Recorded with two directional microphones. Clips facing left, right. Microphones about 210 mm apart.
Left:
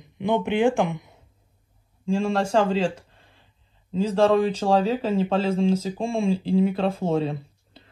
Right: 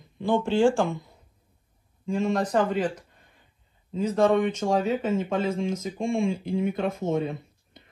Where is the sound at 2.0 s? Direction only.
30° left (ahead or behind).